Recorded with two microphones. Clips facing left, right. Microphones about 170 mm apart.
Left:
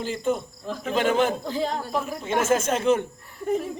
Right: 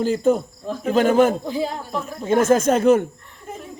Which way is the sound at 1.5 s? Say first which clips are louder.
Right 2 dB; 10° right (ahead or behind).